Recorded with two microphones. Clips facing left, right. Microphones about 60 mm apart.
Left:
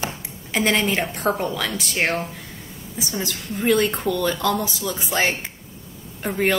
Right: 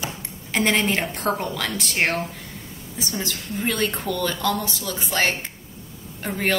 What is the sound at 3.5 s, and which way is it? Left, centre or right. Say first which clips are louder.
A woman's voice: left 5 dB; centre.